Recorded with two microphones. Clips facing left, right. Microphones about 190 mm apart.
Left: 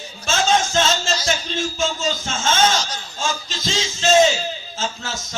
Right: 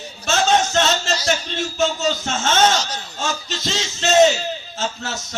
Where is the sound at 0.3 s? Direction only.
65° right (ahead or behind).